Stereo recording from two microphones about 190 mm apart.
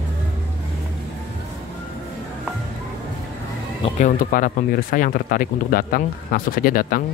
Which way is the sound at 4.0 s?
45° left (ahead or behind).